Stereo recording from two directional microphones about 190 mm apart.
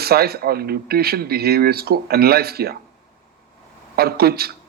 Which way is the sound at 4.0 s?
55° right (ahead or behind).